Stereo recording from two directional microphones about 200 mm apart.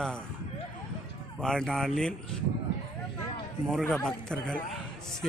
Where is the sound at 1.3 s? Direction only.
5° left (ahead or behind).